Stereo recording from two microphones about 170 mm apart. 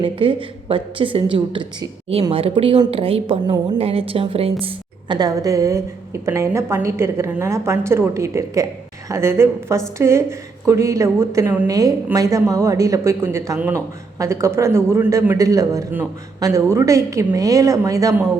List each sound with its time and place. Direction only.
0.0 s a woman's voice: 30° right (ahead or behind)